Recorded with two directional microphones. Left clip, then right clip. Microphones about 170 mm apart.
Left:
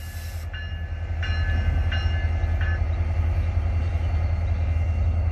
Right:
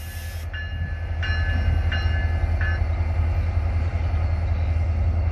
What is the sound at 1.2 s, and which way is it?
Train, centre (ahead or behind).